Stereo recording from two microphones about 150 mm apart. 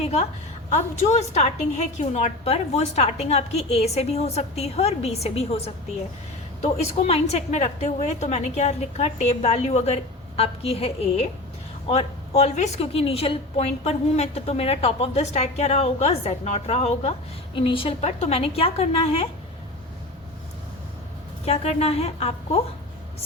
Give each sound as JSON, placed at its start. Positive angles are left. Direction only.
{"t": 0.0, "sound": "a woman's voice", "side_deg": 45}
{"t": 21.4, "sound": "a woman's voice", "side_deg": 45}